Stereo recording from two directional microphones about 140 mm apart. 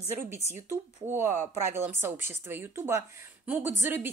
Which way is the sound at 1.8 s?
15° right (ahead or behind).